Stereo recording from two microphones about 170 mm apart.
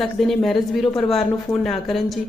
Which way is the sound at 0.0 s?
Centre (ahead or behind).